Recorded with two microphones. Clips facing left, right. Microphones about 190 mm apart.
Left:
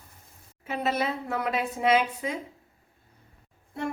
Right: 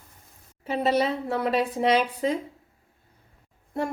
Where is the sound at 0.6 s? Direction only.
30° right (ahead or behind).